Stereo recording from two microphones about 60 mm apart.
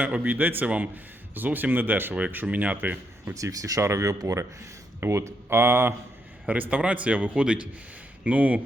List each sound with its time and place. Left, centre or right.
0.3 s a man's voice: right
3.3 s speech: right
4.9 s speech: right
6.5 s a man's voice: right